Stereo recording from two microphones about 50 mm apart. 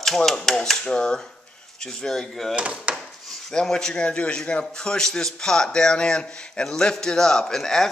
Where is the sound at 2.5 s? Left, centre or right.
Right.